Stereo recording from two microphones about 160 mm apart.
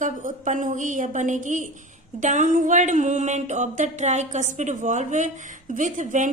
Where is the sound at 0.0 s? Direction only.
50° right (ahead or behind).